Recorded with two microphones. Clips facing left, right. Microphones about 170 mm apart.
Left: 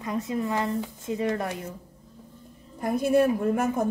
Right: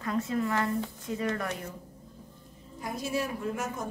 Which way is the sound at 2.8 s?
55° left (ahead or behind).